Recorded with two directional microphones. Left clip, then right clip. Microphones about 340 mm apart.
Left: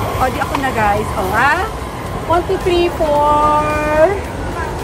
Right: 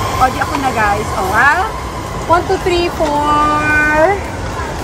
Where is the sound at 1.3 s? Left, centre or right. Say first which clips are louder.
Right 3 dB; centre.